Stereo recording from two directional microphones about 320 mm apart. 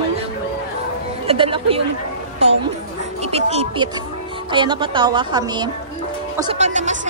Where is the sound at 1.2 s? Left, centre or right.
Centre.